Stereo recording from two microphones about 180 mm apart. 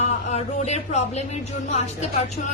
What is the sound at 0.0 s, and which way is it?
A woman's voice, 35° left (ahead or behind).